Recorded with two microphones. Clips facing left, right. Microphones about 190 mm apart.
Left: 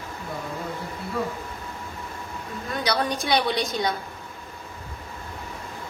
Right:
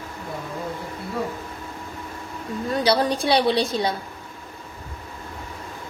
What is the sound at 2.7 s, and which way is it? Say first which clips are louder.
A woman's voice: right 5 dB; 30° right (ahead or behind).